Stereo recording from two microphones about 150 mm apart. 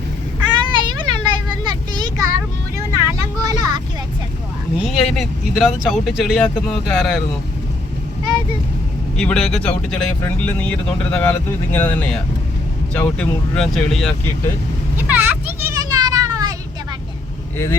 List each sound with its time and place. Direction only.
0.7 s vehicle: 30° right (ahead or behind)
4.8 s speech: centre (ahead or behind)
9.1 s speech: 5° left (ahead or behind)
14.9 s children playing: 10° right (ahead or behind)